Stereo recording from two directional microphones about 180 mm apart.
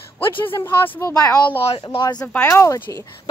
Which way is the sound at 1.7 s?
30° left (ahead or behind).